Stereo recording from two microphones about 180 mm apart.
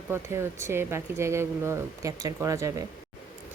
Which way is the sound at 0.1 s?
15° right (ahead or behind).